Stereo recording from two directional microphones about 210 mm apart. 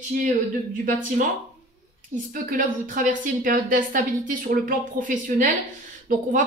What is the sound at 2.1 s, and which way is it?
A woman's voice, 40° right (ahead or behind).